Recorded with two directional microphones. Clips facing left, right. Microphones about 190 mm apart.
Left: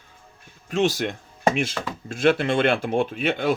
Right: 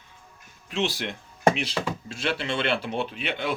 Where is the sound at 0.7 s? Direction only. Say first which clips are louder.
Left 6 dB; 45° left (ahead or behind).